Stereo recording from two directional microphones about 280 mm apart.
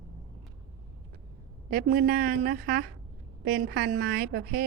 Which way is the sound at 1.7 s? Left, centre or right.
Right.